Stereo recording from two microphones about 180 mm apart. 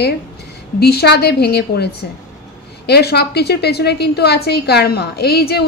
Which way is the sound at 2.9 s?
65° left (ahead or behind).